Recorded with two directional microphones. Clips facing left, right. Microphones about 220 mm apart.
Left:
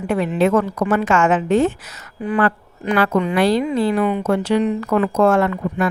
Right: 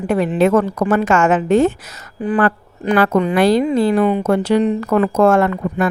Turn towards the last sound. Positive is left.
turn(degrees=-50)  # may be behind; listen again after turning